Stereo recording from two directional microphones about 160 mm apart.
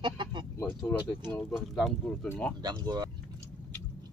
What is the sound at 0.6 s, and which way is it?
Speech, 10° left (ahead or behind).